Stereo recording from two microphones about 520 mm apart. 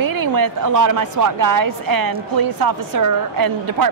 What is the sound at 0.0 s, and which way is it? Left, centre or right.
A woman's voice, right.